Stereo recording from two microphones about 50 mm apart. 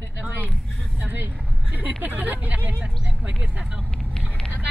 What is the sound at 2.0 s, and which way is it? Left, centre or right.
Speech, right.